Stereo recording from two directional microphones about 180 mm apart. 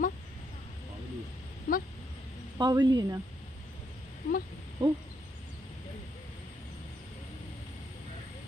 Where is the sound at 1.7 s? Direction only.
50° left (ahead or behind).